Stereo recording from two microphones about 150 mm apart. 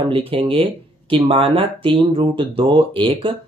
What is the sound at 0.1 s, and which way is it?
Speech, 35° right (ahead or behind).